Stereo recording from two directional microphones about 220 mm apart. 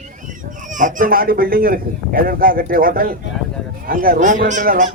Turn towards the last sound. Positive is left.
turn(degrees=-35)  # may be behind; listen again after turning